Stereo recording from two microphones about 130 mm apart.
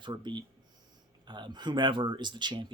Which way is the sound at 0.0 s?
35° right (ahead or behind).